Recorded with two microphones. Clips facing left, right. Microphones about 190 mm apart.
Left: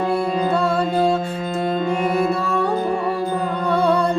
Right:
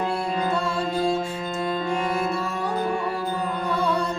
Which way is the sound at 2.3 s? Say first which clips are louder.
Left 7 dB; 60° left (ahead or behind).